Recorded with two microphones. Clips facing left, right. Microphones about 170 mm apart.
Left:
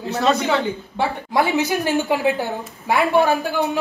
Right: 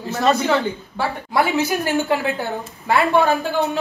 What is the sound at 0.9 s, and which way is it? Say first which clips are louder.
Speech: left 1 dB; 20° left (ahead or behind).